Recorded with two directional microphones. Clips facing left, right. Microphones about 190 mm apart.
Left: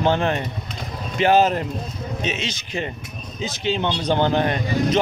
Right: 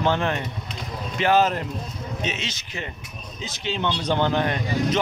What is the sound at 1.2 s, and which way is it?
Speech, 20° left (ahead or behind).